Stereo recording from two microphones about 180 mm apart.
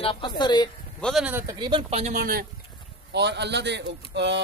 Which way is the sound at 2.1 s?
50° right (ahead or behind).